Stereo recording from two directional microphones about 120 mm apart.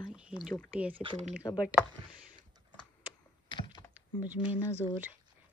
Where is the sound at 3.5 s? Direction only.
40° left (ahead or behind).